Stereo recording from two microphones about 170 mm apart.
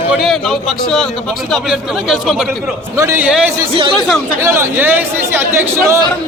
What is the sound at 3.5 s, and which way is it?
Speech, 30° right (ahead or behind).